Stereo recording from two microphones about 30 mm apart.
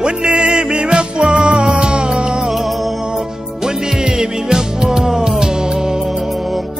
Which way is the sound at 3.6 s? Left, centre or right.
Right.